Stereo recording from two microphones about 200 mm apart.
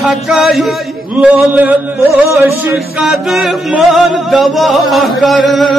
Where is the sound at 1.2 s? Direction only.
5° right (ahead or behind).